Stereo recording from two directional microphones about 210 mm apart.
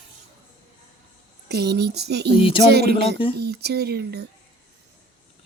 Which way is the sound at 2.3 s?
25° left (ahead or behind).